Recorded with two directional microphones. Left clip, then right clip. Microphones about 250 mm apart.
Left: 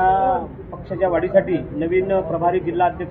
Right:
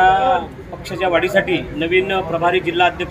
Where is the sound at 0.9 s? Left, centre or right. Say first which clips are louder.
Right 1 dB; centre.